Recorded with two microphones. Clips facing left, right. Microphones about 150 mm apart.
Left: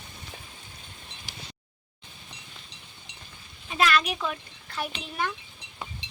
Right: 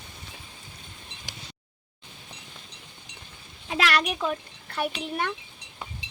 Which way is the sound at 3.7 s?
85° right.